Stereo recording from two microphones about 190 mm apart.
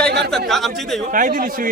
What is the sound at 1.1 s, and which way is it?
Speech, 45° right (ahead or behind).